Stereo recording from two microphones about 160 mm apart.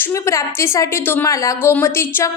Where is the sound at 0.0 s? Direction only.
20° left (ahead or behind).